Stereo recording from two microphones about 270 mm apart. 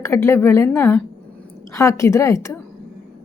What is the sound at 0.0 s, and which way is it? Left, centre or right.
A woman's voice, centre.